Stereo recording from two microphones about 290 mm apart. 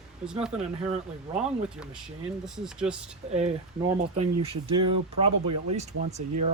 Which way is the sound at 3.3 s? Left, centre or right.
Right.